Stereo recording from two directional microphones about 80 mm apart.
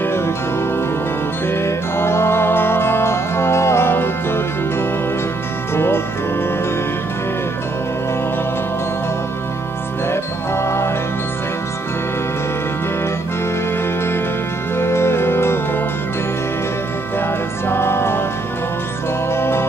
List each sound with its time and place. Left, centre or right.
0.0 s music: left
1.5 s music: left
10.0 s music: left
14.8 s music: left
17.6 s music: left
19.3 s music: left